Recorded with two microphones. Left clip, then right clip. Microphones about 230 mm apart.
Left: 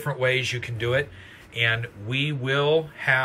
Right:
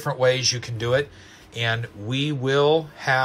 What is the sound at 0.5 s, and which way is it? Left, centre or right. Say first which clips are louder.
Speech: right 4 dB; right.